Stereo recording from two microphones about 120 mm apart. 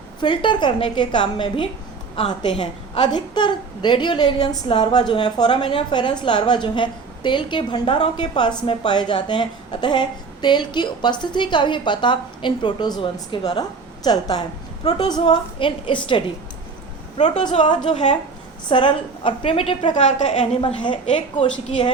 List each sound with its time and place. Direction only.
0.2 s a woman's voice: 40° left (ahead or behind)
17.6 s a woman's voice: 40° left (ahead or behind)
17.9 s a woman's voice: 70° left (ahead or behind)
18.7 s a woman's voice: 45° left (ahead or behind)
19.9 s a woman's voice: 80° left
20.6 s a woman's voice: 45° left (ahead or behind)